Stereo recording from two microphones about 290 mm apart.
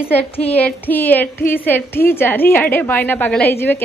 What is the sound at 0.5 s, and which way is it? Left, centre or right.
A woman's voice, centre.